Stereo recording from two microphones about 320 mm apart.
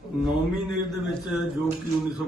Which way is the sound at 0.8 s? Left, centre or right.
Centre.